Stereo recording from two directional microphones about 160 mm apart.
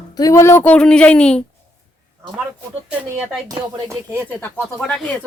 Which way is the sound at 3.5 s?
20° right (ahead or behind).